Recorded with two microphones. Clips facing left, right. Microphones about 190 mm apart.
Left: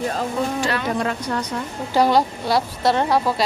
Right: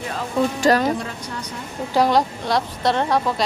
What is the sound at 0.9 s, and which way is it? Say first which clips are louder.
Speech: left 6 dB; 70° left (ahead or behind).